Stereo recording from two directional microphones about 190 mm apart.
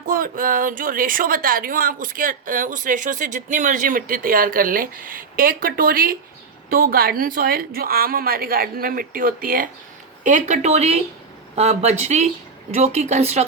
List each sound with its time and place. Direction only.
0.0 s speech: 50° right (ahead or behind)